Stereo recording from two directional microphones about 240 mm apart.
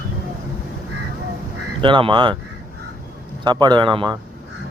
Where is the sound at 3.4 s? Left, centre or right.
Centre.